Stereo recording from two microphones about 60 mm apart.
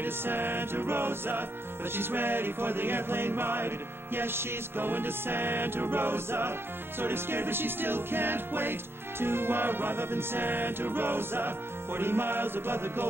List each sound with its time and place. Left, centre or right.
0.0 s music: right